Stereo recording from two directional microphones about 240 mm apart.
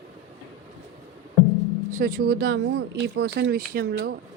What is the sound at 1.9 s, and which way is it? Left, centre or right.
Speech, right.